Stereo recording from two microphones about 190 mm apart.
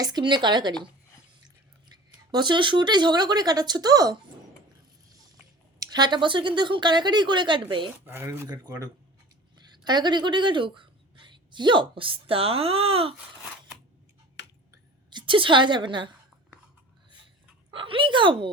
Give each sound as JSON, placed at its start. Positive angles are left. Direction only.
{"t": 0.0, "sound": "speech", "side_deg": -20}
{"t": 2.3, "sound": "speech", "side_deg": -25}
{"t": 5.8, "sound": "speech", "side_deg": -20}
{"t": 8.0, "sound": "speech", "side_deg": -10}
{"t": 14.4, "sound": "a sound", "side_deg": 65}
{"t": 15.1, "sound": "a woman's voice", "side_deg": -25}
{"t": 17.7, "sound": "speech", "side_deg": -25}